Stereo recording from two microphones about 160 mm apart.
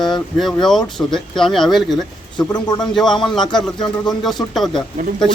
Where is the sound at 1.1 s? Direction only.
Centre (ahead or behind).